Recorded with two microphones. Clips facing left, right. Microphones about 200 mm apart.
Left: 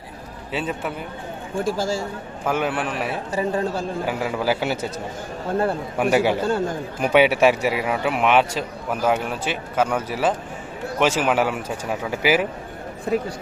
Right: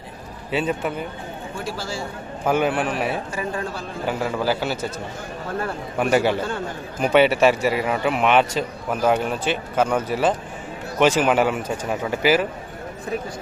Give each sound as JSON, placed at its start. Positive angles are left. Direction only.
{"t": 0.5, "sound": "a man's voice", "side_deg": 0}
{"t": 1.5, "sound": "speech", "side_deg": 50}
{"t": 2.5, "sound": "a man's voice", "side_deg": 0}
{"t": 3.3, "sound": "speech", "side_deg": 35}
{"t": 4.0, "sound": "a man's voice", "side_deg": 5}
{"t": 6.0, "sound": "a man's voice", "side_deg": 10}
{"t": 6.4, "sound": "speech", "side_deg": 40}
{"t": 7.0, "sound": "a man's voice", "side_deg": 10}